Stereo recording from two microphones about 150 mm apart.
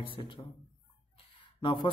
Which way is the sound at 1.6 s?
35° left (ahead or behind).